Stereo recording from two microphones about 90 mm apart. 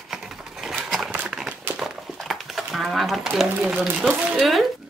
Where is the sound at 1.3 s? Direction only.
5° right (ahead or behind).